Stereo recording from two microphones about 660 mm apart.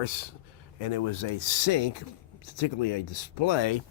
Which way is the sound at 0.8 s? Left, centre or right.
Left.